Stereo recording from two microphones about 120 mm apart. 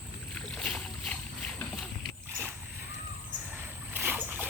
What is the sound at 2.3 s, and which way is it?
Vehicle, 20° right (ahead or behind).